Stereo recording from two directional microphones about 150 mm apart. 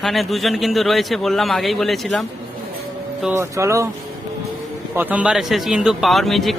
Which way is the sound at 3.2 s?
10° right (ahead or behind).